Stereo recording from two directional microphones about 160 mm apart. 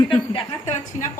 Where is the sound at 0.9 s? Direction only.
45° left (ahead or behind).